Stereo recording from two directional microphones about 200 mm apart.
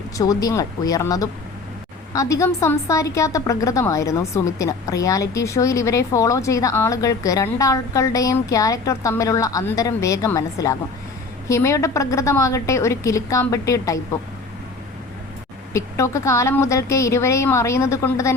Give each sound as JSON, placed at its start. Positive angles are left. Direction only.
{"t": 0.2, "sound": "a woman's voice", "side_deg": 20}
{"t": 15.7, "sound": "a woman's voice", "side_deg": 15}